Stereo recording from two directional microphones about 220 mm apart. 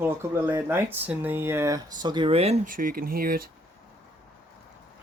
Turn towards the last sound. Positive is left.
turn(degrees=-40)  # may be behind; listen again after turning